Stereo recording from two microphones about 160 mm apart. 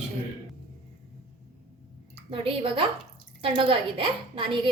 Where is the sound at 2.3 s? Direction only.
35° right (ahead or behind).